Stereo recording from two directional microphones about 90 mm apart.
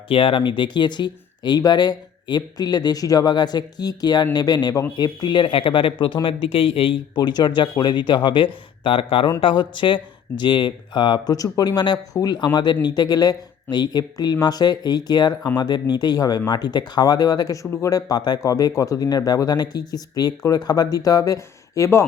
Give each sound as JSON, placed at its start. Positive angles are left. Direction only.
{"t": 0.1, "sound": "speech", "side_deg": 80}
{"t": 6.2, "sound": "speech", "side_deg": 85}
{"t": 7.2, "sound": "speech", "side_deg": 55}
{"t": 9.4, "sound": "speech", "side_deg": 65}